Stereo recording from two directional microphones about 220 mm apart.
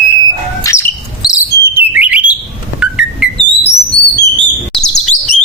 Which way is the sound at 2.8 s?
5° right (ahead or behind).